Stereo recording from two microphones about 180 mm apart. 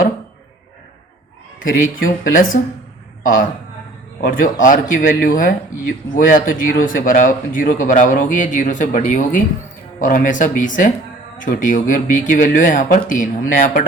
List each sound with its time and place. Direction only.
1.6 s speech: 50° left (ahead or behind)
4.2 s speech: 50° left (ahead or behind)